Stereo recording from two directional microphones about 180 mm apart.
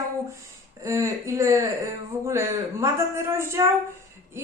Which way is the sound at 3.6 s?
15° right (ahead or behind).